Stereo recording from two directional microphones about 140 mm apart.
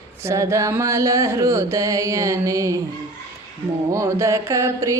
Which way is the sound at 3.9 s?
20° right (ahead or behind).